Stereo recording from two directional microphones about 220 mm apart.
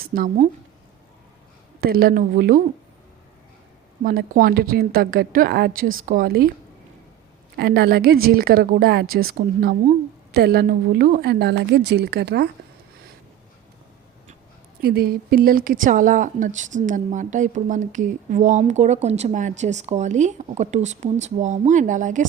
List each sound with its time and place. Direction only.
0.0 s speech: 40° right (ahead or behind)
1.8 s a woman's voice: 45° right (ahead or behind)
4.0 s a woman's voice: 40° right (ahead or behind)
7.5 s a woman's voice: 45° right (ahead or behind)
14.8 s a woman's voice: 45° right (ahead or behind)